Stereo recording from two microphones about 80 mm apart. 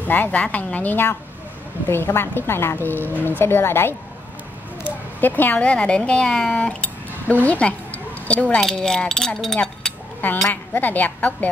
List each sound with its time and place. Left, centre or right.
0.0 s a woman's voice: left; by 9.6 s centre
10.2 s a woman's voice: left